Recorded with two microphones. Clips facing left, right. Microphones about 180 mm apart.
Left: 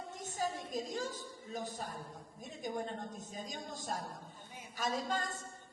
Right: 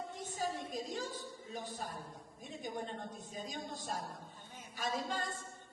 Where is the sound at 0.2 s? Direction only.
45° left (ahead or behind).